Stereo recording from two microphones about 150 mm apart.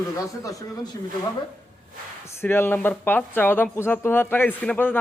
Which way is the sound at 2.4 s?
15° left (ahead or behind).